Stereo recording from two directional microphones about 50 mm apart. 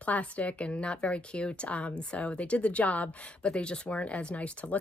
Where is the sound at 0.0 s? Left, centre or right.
Left.